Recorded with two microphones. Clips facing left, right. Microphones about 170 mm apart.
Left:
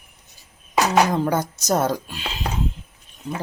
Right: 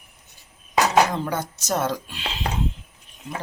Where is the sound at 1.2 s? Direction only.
40° left (ahead or behind).